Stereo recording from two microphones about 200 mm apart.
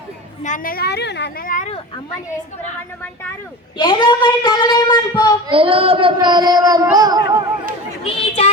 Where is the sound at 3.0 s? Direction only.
10° left (ahead or behind).